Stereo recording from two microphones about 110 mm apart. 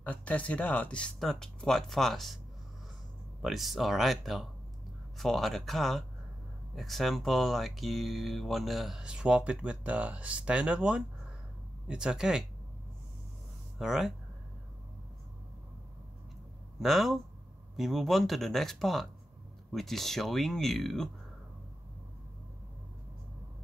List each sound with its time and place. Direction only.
0.0 s speech: 15° left (ahead or behind)
3.4 s speech: centre (ahead or behind)
13.7 s speech: centre (ahead or behind)
16.8 s speech: centre (ahead or behind)